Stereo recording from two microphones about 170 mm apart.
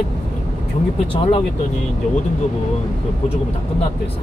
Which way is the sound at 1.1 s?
30° left (ahead or behind).